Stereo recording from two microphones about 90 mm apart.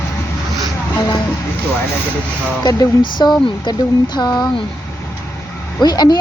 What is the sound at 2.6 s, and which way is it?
Speech, 50° left (ahead or behind).